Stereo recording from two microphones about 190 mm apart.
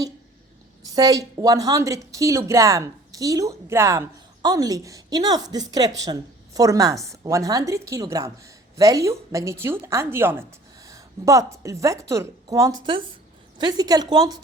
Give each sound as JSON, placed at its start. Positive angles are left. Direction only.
{"t": 0.9, "sound": "a woman's voice", "side_deg": -20}